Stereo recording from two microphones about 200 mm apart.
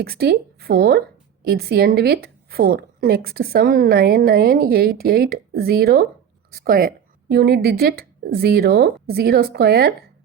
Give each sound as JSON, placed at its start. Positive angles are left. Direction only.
{"t": 0.0, "sound": "a woman's voice", "side_deg": -50}